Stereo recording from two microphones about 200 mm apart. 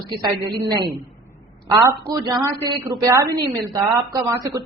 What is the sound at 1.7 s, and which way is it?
A man's voice, 15° right (ahead or behind).